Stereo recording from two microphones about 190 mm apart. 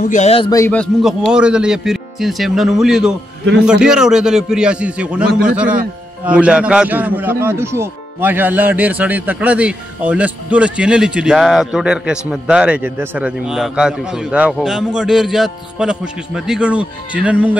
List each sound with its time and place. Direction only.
0.0 s speech: 40° left (ahead or behind)
0.5 s a man's voice: 15° left (ahead or behind)
0.7 s a man's voice: centre (ahead or behind)